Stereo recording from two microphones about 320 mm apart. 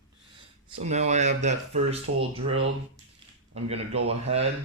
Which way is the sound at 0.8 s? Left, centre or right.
Right.